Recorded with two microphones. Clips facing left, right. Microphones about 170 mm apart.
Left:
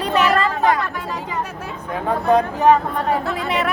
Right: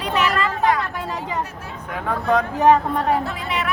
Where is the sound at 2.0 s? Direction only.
30° left (ahead or behind).